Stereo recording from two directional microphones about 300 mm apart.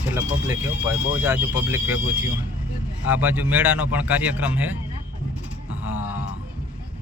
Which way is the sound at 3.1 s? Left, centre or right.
Centre.